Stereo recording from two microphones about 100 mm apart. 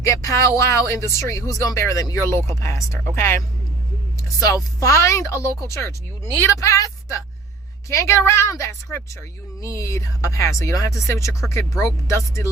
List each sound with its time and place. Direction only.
0.1 s speech: 30° left (ahead or behind)
4.4 s speech: 35° left (ahead or behind)